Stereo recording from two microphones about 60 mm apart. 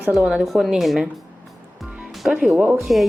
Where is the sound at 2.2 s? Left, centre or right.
Centre.